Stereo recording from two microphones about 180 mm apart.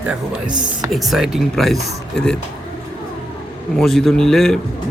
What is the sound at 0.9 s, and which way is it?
A man's voice, centre (ahead or behind).